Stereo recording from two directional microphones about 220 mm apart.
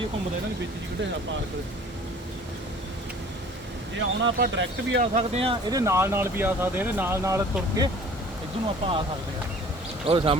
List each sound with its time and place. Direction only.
4.2 s speech: 55° right (ahead or behind)
5.1 s speech: 30° right (ahead or behind)
8.6 s speech: 25° right (ahead or behind)
10.1 s speech: 25° right (ahead or behind)